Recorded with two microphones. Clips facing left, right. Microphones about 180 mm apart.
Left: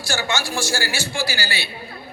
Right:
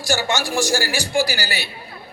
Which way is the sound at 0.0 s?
15° right (ahead or behind).